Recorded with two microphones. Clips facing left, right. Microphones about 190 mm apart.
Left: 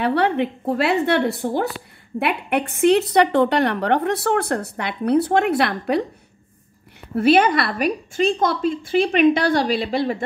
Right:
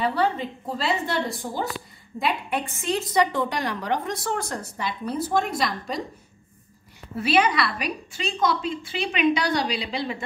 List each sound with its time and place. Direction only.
0.0 s a woman's voice: 65° left (ahead or behind)
7.2 s a woman's voice: 50° left (ahead or behind)